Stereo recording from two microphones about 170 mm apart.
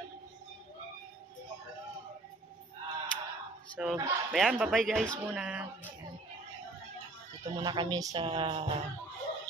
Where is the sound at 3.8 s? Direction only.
5° right (ahead or behind).